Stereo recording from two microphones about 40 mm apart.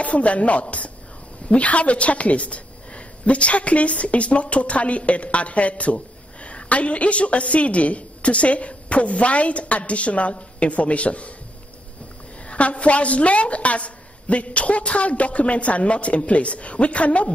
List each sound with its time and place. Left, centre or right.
0.0 s a woman's voice: left
12.4 s a woman's voice: left